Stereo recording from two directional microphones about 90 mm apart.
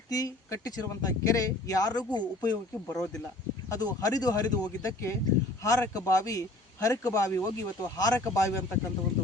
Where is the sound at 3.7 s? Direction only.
45° left (ahead or behind).